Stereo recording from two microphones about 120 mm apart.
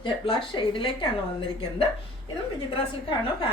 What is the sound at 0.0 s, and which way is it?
Speech, 45° left (ahead or behind).